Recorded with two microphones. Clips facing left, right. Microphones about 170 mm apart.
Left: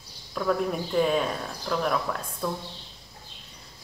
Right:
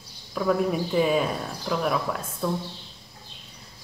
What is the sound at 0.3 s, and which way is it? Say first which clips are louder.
A woman's voice: right 3 dB; 5° right (ahead or behind).